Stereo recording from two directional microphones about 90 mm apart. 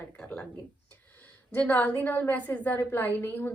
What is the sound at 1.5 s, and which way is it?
Speech, 15° left (ahead or behind).